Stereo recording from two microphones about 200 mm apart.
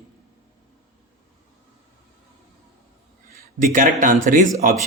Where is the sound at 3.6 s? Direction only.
40° right (ahead or behind).